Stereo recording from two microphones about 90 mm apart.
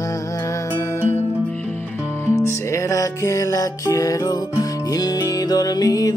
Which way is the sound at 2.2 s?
30° left (ahead or behind).